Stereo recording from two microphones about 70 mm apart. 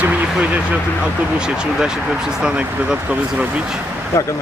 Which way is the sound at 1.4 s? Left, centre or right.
Centre.